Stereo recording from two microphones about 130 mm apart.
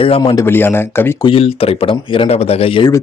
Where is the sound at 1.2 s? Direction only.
45° left (ahead or behind).